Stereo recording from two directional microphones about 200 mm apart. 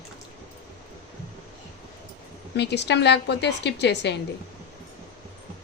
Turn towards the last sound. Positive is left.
turn(degrees=60)  # may be behind; listen again after turning